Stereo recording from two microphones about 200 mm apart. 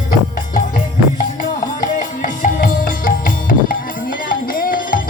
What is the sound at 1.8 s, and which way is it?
Music, 40° left (ahead or behind).